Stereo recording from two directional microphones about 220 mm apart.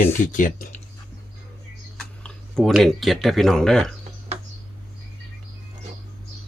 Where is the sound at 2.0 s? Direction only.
Centre (ahead or behind).